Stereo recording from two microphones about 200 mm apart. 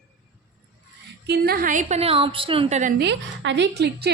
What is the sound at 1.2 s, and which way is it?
A woman's voice, 55° right (ahead or behind).